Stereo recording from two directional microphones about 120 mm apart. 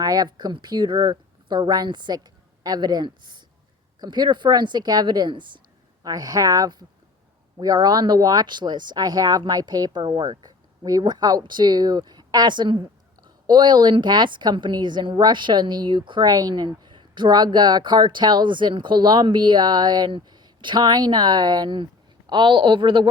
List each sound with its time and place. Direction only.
0.0 s a woman's voice: 35° right (ahead or behind)
10.2 s a woman's voice: 30° right (ahead or behind)